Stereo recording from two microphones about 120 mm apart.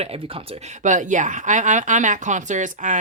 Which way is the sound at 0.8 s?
90° right.